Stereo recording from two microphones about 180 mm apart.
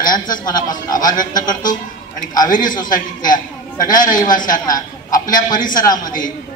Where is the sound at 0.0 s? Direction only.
50° left (ahead or behind).